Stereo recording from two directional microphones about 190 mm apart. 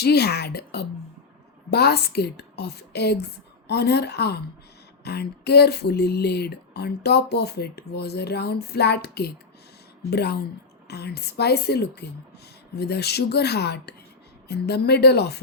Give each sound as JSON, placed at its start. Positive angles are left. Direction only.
{"t": 0.0, "sound": "speech", "side_deg": 60}